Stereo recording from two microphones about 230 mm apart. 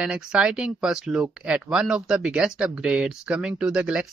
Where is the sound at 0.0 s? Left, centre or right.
Centre.